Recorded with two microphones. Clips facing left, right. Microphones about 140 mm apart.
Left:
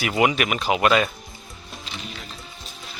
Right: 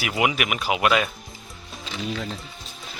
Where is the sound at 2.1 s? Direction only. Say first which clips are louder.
Right 9 dB; 90° right.